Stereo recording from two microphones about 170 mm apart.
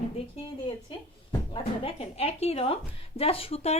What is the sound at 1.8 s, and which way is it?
Speech, 35° left (ahead or behind).